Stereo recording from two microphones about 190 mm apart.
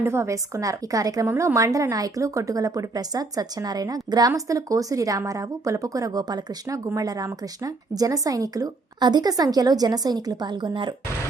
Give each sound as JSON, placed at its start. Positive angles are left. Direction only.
{"t": 0.0, "sound": "a woman's voice", "side_deg": -15}